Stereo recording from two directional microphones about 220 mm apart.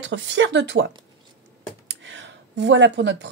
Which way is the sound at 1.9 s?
55° right (ahead or behind).